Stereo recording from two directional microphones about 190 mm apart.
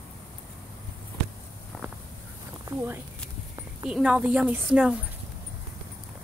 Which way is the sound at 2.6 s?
10° right (ahead or behind).